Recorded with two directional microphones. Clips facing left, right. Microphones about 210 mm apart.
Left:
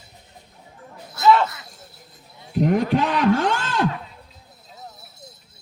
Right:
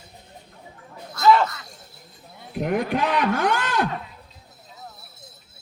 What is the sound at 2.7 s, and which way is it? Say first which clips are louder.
Speech: left 2 dB; 30° left (ahead or behind).